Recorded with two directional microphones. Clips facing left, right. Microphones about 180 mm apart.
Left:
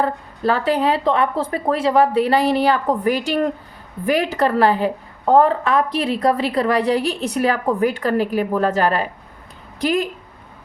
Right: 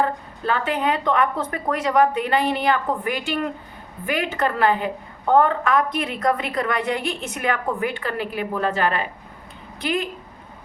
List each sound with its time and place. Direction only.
0.0 s a woman's voice: 35° left (ahead or behind)